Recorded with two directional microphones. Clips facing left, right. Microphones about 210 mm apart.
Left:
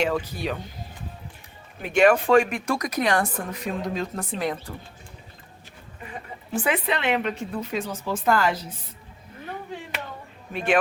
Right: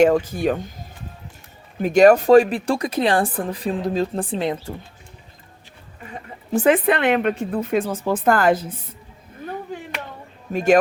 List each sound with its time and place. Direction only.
0.0 s speech: 45° right (ahead or behind)
1.8 s speech: 40° right (ahead or behind)
6.5 s speech: 45° right (ahead or behind)
10.5 s speech: 45° right (ahead or behind)